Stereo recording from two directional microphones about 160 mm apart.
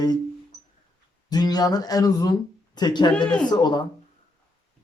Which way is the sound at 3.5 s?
25° left (ahead or behind).